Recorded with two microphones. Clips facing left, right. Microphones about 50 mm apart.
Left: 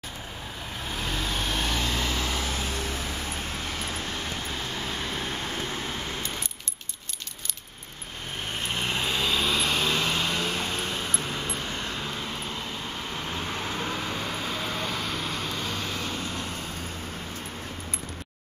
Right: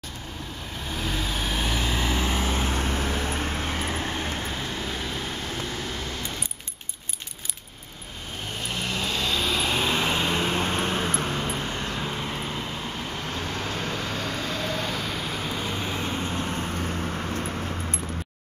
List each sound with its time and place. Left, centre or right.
0.9 s vehicle: centre; by 4.3 s right
8.8 s vehicle: left
9.1 s vehicle: centre
9.7 s vehicle: centre; by 11.2 s right
11.2 s vehicle: right
11.9 s vehicle: centre
14.1 s vehicle: centre; by 17.4 s right